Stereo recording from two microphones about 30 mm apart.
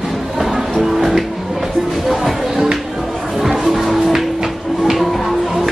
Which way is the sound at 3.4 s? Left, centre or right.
Centre.